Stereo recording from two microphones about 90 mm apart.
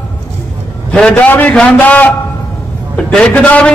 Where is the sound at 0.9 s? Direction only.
15° left (ahead or behind).